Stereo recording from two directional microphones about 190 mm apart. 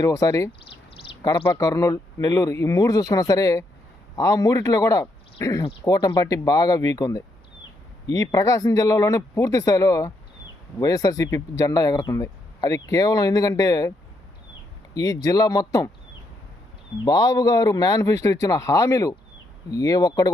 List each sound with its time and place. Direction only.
0.0 s speech: 15° left (ahead or behind)
1.5 s speech: 20° left (ahead or behind)
14.9 s speech: 20° left (ahead or behind)
17.1 s speech: 20° left (ahead or behind)